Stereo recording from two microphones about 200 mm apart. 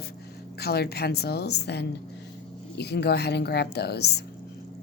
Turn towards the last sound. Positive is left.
turn(degrees=55)  # may be behind; listen again after turning